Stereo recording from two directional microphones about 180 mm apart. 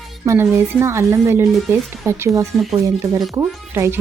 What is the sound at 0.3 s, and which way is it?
A woman's voice, 15° right (ahead or behind).